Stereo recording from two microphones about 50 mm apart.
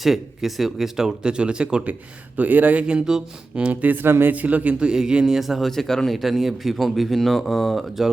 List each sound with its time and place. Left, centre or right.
0.0 s speech: centre
1.9 s speech: right
2.8 s speech: centre
3.7 s speech: right
4.0 s speech: right
4.3 s speech: right
4.8 s speech: centre
6.2 s speech: centre